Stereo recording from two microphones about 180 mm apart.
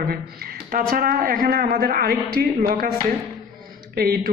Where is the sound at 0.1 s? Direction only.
55° right (ahead or behind).